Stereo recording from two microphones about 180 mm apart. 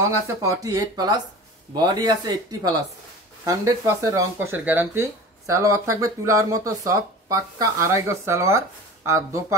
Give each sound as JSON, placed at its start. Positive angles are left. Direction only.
{"t": 0.0, "sound": "speech", "side_deg": -20}